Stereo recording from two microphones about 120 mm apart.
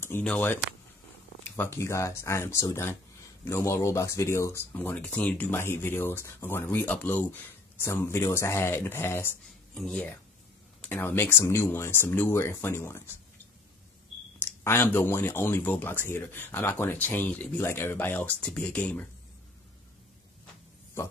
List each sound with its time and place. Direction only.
0.2 s speech: 10° left (ahead or behind)
9.8 s speech: 5° left (ahead or behind)
14.4 s speech: 20° left (ahead or behind)